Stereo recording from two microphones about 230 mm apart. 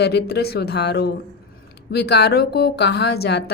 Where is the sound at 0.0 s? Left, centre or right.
Left.